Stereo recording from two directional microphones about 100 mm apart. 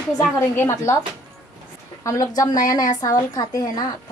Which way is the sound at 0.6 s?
25° left (ahead or behind).